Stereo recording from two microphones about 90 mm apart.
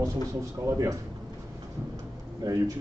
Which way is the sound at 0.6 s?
35° right (ahead or behind).